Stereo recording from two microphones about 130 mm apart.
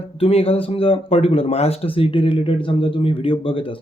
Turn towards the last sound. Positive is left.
turn(degrees=45)  # may be behind; listen again after turning